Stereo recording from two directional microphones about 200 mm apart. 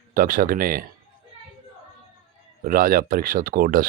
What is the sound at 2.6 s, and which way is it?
Speech, 45° right (ahead or behind).